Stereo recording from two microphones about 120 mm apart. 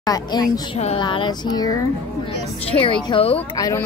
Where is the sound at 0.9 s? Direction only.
45° left (ahead or behind).